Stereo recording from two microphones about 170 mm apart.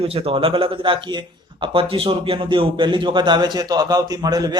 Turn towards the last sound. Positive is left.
turn(degrees=-20)  # may be behind; listen again after turning